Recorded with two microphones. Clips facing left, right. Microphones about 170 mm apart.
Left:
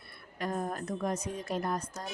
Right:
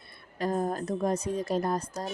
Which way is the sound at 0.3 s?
35° right (ahead or behind).